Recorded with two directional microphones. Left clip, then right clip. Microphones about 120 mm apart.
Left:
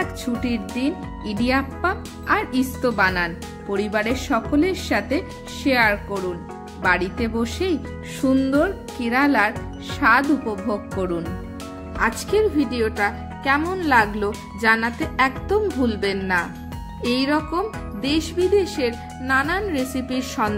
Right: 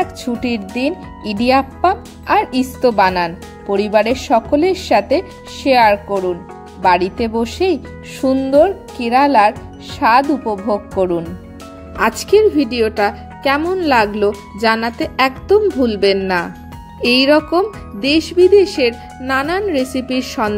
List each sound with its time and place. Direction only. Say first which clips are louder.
0.4 s speech: right 7 dB; 45° right (ahead or behind); by 10.3 s 30° right (ahead or behind)
10.4 s speech: right 7 dB; 5° left (ahead or behind)
11.0 s speech: right 11 dB; 35° right (ahead or behind)
12.0 s speech: right 8 dB; 55° right (ahead or behind)
17.5 s speech: right 8 dB; 55° right (ahead or behind)